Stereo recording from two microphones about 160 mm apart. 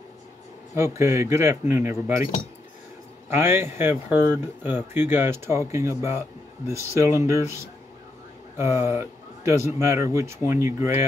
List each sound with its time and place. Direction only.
0.7 s speech: 15° right (ahead or behind)
3.3 s speech: 15° right (ahead or behind)
8.5 s speech: 15° right (ahead or behind)